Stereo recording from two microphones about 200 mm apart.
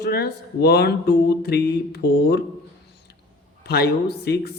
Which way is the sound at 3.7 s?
55° left (ahead or behind).